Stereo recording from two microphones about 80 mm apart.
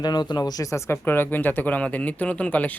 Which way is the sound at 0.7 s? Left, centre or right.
Left.